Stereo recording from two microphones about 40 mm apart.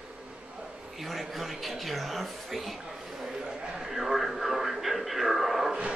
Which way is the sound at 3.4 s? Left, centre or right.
Centre.